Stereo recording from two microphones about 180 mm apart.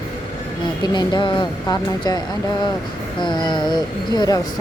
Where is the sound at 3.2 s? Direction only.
25° left (ahead or behind).